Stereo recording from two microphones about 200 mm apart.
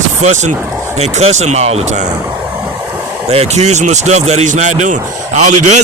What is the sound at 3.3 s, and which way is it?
A man's voice, 30° right (ahead or behind).